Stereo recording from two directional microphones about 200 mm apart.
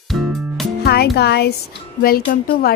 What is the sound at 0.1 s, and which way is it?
Music, centre (ahead or behind).